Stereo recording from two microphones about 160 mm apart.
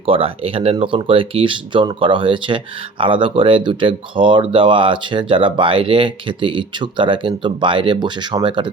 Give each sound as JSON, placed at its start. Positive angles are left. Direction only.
{"t": 0.0, "sound": "speech", "side_deg": -35}